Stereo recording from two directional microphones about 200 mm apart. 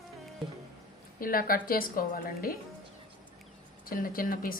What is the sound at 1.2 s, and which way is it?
Speech, 45° left (ahead or behind).